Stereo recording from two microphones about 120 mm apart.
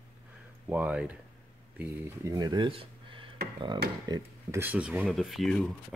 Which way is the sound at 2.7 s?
45° right (ahead or behind).